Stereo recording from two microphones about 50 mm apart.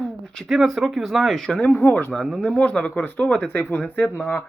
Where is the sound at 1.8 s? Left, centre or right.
Left.